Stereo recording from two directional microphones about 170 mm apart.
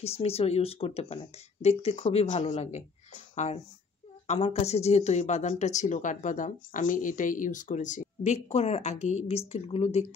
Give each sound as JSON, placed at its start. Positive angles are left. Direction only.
{"t": 0.0, "sound": "speech", "side_deg": 35}
{"t": 4.3, "sound": "speech", "side_deg": 35}